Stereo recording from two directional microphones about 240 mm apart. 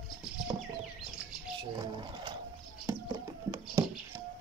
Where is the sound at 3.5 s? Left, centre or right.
Centre.